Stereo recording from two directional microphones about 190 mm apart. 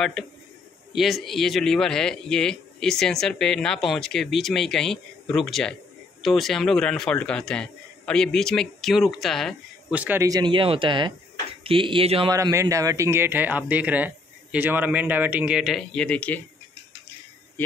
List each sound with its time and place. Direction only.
0.9 s a man's voice: centre (ahead or behind); by 12.3 s 30° right (ahead or behind)
12.3 s speech: 15° right (ahead or behind); by 16.4 s 10° left (ahead or behind)